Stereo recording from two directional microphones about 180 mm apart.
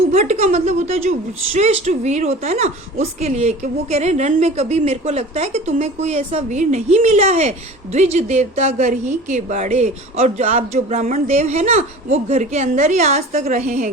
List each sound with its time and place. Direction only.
0.1 s a woman's voice: 35° right (ahead or behind)